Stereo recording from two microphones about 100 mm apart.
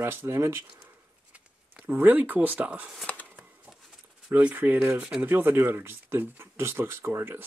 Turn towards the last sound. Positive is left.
turn(degrees=-25)  # may be behind; listen again after turning